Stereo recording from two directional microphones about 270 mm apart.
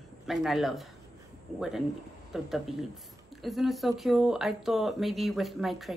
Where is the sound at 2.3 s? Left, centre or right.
Centre.